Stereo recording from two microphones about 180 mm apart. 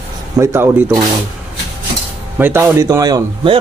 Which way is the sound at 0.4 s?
15° right (ahead or behind).